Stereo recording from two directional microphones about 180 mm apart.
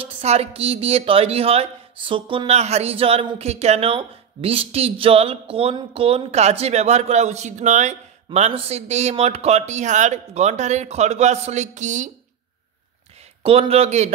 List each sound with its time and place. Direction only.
0.0 s speech: 35° right (ahead or behind)
13.4 s speech: 30° right (ahead or behind)